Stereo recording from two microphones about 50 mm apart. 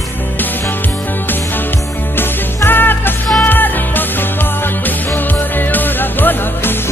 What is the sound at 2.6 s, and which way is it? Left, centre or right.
Music, left.